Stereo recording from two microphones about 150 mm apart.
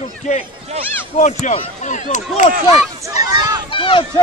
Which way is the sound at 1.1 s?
50° left (ahead or behind).